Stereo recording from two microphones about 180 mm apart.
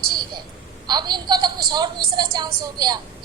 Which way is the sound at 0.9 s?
25° right (ahead or behind).